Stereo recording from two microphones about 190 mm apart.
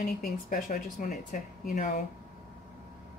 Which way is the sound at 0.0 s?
45° left (ahead or behind).